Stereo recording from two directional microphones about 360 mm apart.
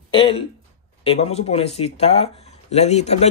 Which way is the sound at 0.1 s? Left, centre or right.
Centre.